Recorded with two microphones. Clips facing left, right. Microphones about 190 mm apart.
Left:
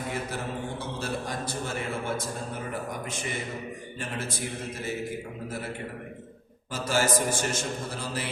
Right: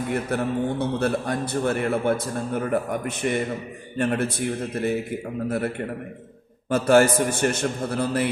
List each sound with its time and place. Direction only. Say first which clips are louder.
0.1 s a man's voice: right 10 dB; 60° right (ahead or behind)